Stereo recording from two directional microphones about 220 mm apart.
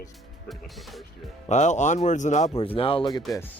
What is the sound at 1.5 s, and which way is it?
Speech, 30° left (ahead or behind).